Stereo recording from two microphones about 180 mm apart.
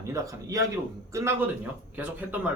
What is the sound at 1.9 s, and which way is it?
Speech, 10° right (ahead or behind).